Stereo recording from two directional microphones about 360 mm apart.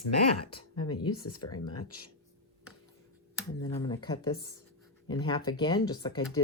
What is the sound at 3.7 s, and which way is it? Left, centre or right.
Speech, centre.